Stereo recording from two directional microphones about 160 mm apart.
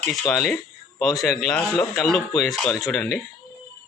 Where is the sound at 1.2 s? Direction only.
Centre (ahead or behind).